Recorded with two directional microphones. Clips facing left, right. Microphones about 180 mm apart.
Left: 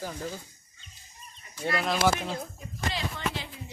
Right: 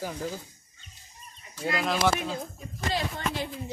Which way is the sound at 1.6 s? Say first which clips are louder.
Even; centre (ahead or behind).